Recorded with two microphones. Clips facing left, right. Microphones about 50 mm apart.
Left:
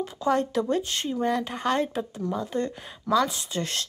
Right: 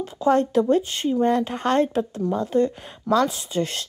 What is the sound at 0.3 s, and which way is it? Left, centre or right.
Speech, right.